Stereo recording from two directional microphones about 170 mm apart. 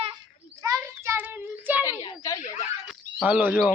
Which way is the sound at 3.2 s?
10° right (ahead or behind).